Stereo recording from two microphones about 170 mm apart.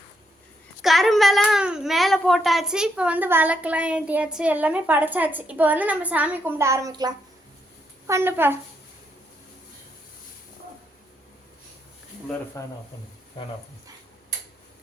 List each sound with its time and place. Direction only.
0.8 s speech: centre (ahead or behind)